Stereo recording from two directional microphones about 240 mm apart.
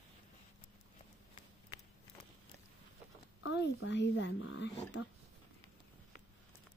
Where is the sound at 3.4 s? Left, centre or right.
Left.